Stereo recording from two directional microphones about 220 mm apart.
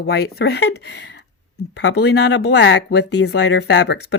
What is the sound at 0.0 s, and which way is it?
Speech, 45° left (ahead or behind).